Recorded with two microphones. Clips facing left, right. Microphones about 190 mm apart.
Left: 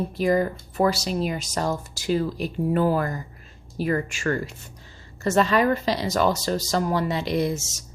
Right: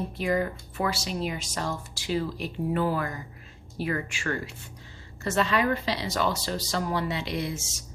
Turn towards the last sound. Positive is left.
turn(degrees=40)  # may be behind; listen again after turning